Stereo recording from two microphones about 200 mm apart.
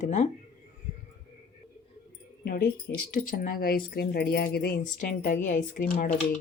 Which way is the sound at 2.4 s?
50° left (ahead or behind).